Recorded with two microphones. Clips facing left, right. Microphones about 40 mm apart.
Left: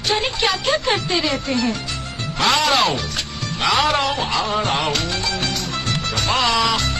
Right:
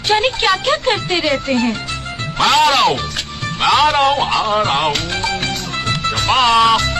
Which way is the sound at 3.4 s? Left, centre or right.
Right.